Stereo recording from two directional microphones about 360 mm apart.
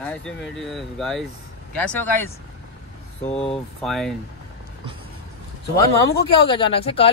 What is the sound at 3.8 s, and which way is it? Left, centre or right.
Speech, centre.